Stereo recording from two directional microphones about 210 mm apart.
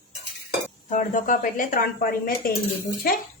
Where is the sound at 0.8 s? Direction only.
35° left (ahead or behind).